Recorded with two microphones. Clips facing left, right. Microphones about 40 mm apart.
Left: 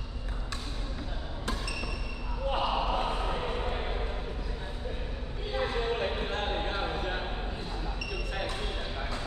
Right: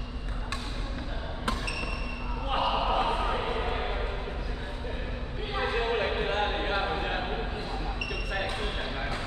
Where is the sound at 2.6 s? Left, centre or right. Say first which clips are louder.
Right 4 dB; right.